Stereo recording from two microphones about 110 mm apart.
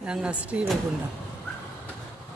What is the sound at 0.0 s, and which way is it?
Speech, 10° right (ahead or behind).